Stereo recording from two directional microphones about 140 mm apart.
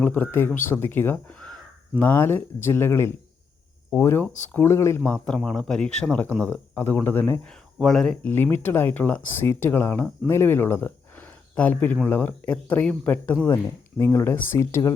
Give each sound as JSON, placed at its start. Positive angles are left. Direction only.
{"t": 0.0, "sound": "speech", "side_deg": 15}
{"t": 5.1, "sound": "speech", "side_deg": 5}
{"t": 7.5, "sound": "speech", "side_deg": 5}